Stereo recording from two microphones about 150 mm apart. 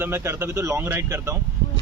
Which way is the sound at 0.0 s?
15° right (ahead or behind).